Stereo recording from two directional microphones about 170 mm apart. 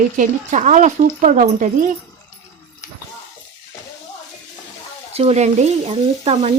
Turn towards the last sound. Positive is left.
turn(degrees=-40)  # may be behind; listen again after turning